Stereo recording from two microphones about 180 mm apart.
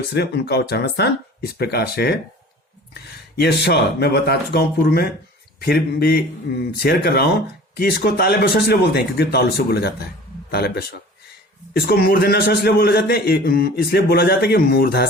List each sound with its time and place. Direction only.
0.1 s a man's voice: 65° left (ahead or behind)